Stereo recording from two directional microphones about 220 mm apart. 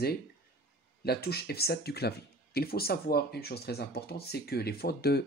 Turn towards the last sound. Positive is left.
turn(degrees=45)  # may be behind; listen again after turning